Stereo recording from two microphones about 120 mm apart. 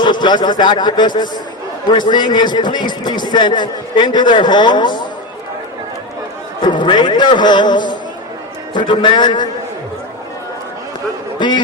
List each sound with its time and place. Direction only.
0.0 s a man's voice: 40° left (ahead or behind)
6.7 s a man's voice: 40° left (ahead or behind)
11.3 s a man's voice: 40° left (ahead or behind)